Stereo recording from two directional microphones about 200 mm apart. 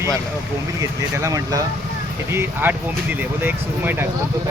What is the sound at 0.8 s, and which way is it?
Speech, 15° right (ahead or behind).